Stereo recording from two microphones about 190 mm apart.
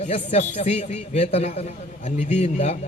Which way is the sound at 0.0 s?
35° left (ahead or behind).